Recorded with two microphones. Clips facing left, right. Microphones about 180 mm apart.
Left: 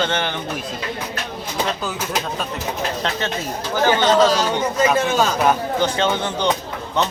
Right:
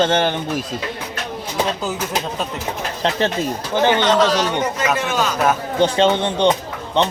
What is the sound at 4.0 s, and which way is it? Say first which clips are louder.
Speech: left 1 dB; 45° left (ahead or behind).